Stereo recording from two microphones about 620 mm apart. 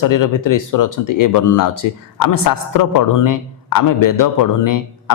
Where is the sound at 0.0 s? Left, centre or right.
Left.